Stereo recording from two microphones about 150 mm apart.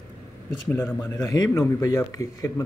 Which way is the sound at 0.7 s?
15° left (ahead or behind).